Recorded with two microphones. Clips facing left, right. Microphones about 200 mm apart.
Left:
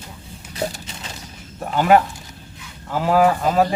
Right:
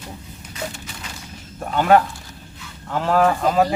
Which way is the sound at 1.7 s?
5° left (ahead or behind).